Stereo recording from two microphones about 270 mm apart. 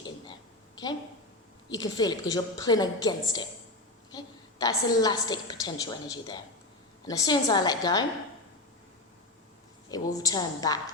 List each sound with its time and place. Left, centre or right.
1.7 s a woman's voice: centre
9.9 s a woman's voice: centre